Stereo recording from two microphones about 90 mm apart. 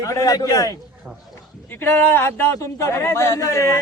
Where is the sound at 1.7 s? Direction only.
25° left (ahead or behind).